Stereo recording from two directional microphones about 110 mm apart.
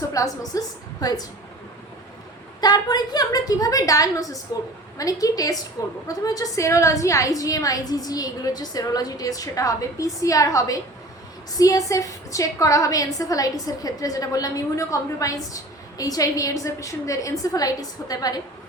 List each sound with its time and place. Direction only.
0.1 s a woman's voice: 30° left (ahead or behind)
2.6 s a woman's voice: 40° left (ahead or behind)